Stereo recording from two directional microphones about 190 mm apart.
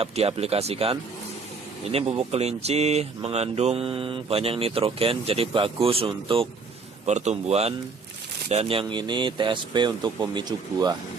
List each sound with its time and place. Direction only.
0.0 s speech: 30° right (ahead or behind)